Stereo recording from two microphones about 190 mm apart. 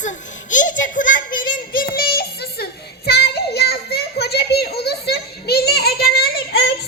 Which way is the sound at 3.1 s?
60° left (ahead or behind).